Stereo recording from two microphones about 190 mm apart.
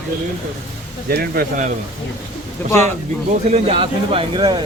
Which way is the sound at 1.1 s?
50° right (ahead or behind).